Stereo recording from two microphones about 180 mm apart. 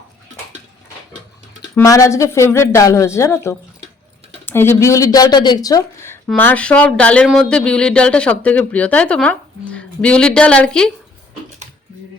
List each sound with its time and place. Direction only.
1.7 s a woman's voice: 20° left (ahead or behind)